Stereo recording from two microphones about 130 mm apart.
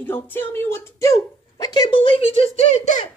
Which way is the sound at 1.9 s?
45° left (ahead or behind).